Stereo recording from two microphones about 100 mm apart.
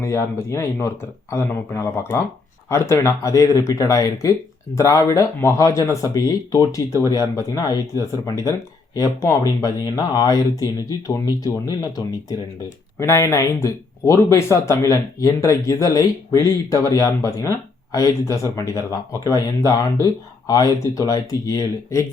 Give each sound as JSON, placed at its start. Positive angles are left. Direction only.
{"t": 0.0, "sound": "speech", "side_deg": 30}
{"t": 9.6, "sound": "speech", "side_deg": 35}
{"t": 13.0, "sound": "speech", "side_deg": 25}